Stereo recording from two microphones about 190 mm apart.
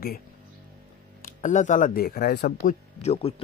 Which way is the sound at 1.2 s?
40° left (ahead or behind).